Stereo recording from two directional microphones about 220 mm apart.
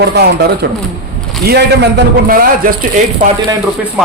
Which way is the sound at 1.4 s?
45° right (ahead or behind).